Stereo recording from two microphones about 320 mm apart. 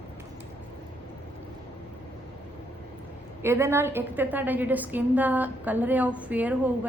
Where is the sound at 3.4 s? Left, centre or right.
Centre.